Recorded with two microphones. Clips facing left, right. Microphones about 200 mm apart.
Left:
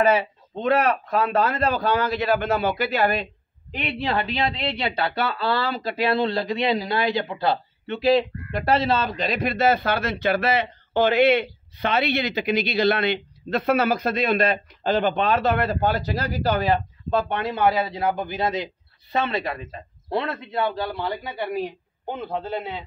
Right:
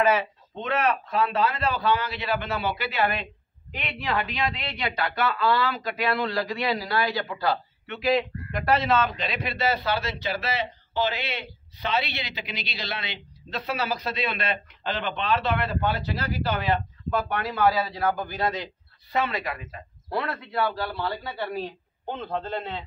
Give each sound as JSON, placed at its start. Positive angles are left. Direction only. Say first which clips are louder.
{"t": 0.1, "sound": "a man's voice", "louder": "left 3 dB", "side_deg": 35}
{"t": 17.1, "sound": "a man's voice", "louder": "left 4 dB", "side_deg": 25}